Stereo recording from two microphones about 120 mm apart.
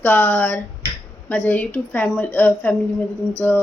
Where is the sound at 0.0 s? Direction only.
10° left (ahead or behind).